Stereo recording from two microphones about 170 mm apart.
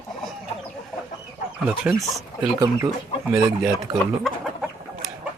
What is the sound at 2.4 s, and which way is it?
Speech, 20° right (ahead or behind).